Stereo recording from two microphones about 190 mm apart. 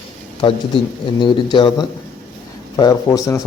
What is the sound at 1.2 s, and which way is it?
Speech, 25° left (ahead or behind).